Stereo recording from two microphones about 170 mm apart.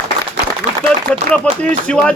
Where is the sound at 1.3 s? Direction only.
5° left (ahead or behind).